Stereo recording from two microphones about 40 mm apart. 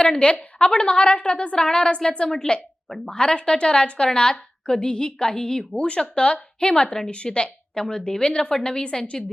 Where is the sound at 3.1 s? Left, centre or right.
Left.